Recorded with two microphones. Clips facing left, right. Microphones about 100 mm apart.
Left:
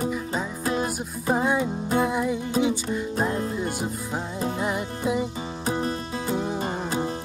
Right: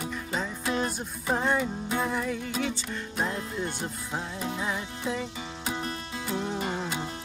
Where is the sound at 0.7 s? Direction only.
10° left (ahead or behind).